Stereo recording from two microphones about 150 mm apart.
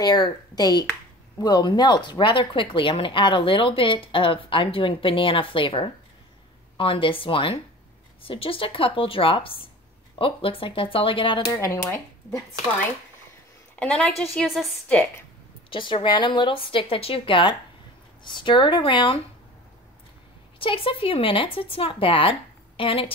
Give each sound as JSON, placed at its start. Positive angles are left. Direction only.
{"t": 0.0, "sound": "speech", "side_deg": 25}
{"t": 11.6, "sound": "speech", "side_deg": 20}
{"t": 13.7, "sound": "a woman's voice", "side_deg": 10}
{"t": 15.7, "sound": "speech", "side_deg": 35}
{"t": 20.5, "sound": "speech", "side_deg": 35}